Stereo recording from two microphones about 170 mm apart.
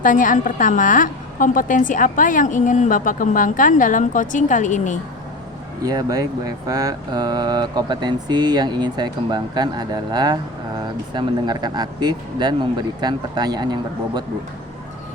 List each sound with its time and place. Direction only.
0.0 s a woman's voice: 50° left (ahead or behind)
5.8 s speech: 20° right (ahead or behind)